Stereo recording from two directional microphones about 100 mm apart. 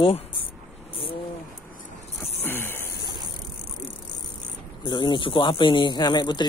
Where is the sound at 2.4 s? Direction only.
20° left (ahead or behind).